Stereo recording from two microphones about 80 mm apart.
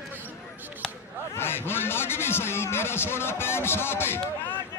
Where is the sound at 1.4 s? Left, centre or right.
Left.